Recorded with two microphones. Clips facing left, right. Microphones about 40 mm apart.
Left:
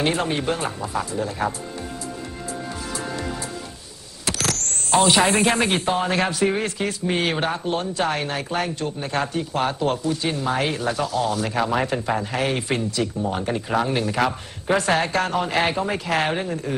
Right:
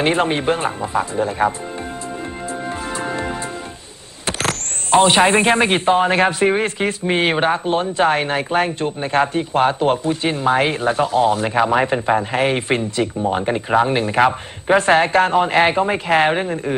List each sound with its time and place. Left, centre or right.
0.0 s speech: right
2.5 s music: right
4.3 s speech: right